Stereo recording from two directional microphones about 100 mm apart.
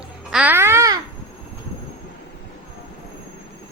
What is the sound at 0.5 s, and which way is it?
Babbling, 25° right (ahead or behind).